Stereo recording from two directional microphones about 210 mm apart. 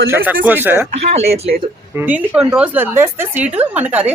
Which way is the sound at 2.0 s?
10° right (ahead or behind).